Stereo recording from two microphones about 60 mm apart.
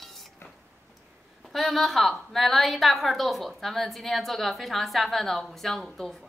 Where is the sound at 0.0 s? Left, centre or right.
Centre.